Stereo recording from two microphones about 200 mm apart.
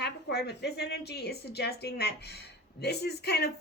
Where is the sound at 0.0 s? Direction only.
55° left (ahead or behind).